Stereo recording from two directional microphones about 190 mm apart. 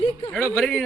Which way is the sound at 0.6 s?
Centre (ahead or behind).